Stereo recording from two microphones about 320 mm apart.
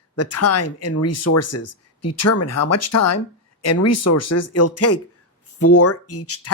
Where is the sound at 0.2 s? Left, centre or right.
Left.